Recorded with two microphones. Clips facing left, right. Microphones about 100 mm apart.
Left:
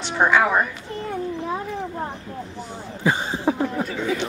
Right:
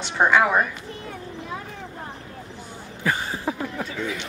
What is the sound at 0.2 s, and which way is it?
Speech, centre (ahead or behind).